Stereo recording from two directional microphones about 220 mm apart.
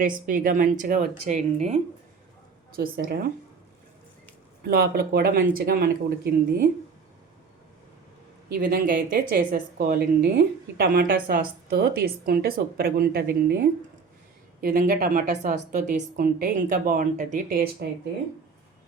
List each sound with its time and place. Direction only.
0.0 s a woman's voice: 40° right (ahead or behind)
2.7 s a woman's voice: 40° right (ahead or behind)
4.7 s a woman's voice: 45° right (ahead or behind)
8.5 s a woman's voice: 40° right (ahead or behind)